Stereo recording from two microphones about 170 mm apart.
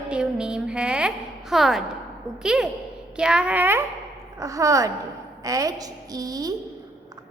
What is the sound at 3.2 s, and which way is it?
A woman's voice, 5° right (ahead or behind).